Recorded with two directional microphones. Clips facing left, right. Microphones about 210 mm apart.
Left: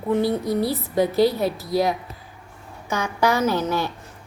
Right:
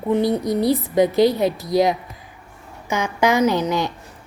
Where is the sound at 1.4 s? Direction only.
5° left (ahead or behind).